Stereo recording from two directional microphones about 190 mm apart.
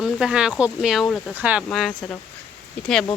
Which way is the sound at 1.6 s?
5° left (ahead or behind).